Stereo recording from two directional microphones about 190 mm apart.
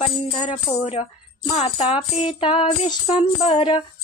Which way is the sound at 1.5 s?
25° left (ahead or behind).